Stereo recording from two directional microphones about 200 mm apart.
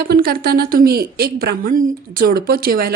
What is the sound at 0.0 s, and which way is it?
Speech, 50° right (ahead or behind).